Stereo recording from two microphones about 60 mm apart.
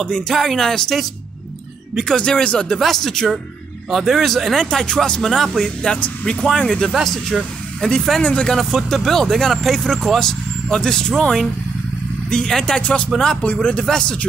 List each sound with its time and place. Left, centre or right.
0.0 s speech: centre
2.0 s speech: centre
2.8 s speech: centre
5.8 s speech: centre
6.9 s speech: centre
7.8 s speech: centre
8.5 s speech: centre
13.4 s speech: left
13.8 s speech: centre